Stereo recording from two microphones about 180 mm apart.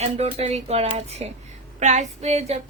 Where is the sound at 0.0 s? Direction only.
35° right (ahead or behind).